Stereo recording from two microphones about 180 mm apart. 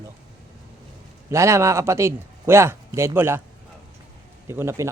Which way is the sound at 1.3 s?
15° right (ahead or behind).